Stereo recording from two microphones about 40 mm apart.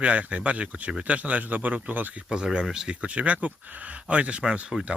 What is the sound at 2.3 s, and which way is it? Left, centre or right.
Speech, right.